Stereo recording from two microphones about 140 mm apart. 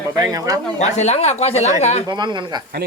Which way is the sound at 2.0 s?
30° right (ahead or behind).